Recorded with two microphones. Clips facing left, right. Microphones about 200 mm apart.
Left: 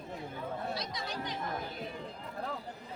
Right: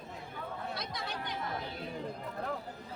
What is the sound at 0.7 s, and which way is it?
Chatter, 55° right (ahead or behind).